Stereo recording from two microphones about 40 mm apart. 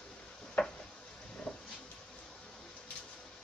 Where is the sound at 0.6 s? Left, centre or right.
Left.